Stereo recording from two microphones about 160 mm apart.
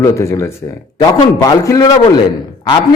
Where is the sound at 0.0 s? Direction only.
20° left (ahead or behind).